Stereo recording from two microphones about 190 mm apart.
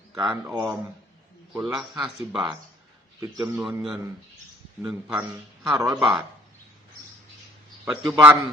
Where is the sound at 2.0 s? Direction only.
5° right (ahead or behind).